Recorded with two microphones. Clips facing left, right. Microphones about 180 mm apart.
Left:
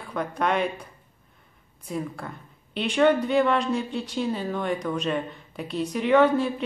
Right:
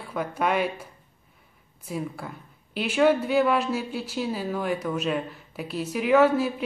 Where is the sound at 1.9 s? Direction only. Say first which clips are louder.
Left 1 dB; 5° right (ahead or behind).